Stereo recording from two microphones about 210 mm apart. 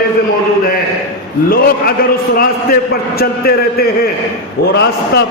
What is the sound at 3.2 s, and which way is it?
A man's voice, 45° left (ahead or behind).